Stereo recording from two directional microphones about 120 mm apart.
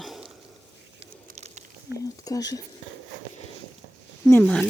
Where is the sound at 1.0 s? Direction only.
65° right (ahead or behind).